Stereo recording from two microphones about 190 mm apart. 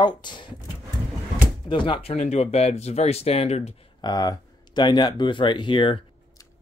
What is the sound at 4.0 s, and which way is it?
Speech, 20° left (ahead or behind).